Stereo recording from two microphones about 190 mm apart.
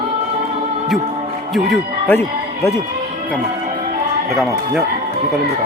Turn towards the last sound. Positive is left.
turn(degrees=0)  # may be behind; listen again after turning